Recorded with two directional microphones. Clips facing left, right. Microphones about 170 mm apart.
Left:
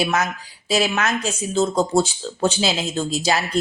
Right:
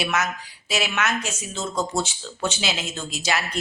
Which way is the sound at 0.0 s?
35° left (ahead or behind).